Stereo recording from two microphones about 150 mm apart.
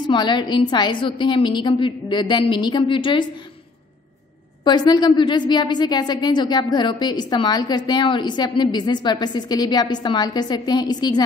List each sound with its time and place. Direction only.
0.0 s a woman's voice: 30° left (ahead or behind)
4.6 s a woman's voice: 30° left (ahead or behind)